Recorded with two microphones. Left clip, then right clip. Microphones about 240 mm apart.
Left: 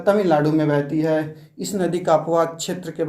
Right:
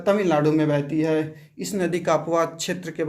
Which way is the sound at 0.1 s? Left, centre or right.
Right.